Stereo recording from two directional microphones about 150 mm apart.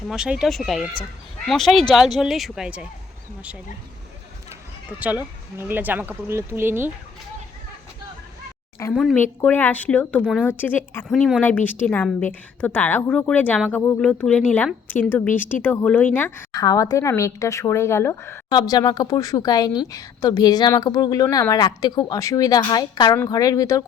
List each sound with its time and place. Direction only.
0.1 s speech: 5° right (ahead or behind)
4.9 s speech: 10° right (ahead or behind)
8.9 s a woman's voice: 5° left (ahead or behind)
11.1 s speech: centre (ahead or behind)
11.3 s a woman's voice: 10° left (ahead or behind)
15.6 s a woman's voice: 10° left (ahead or behind)
16.5 s a woman's voice: 25° left (ahead or behind)